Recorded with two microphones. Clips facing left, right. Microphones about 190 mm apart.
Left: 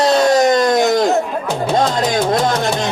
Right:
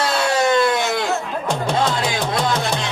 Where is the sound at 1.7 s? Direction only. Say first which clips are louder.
Left 7 dB; 40° left (ahead or behind).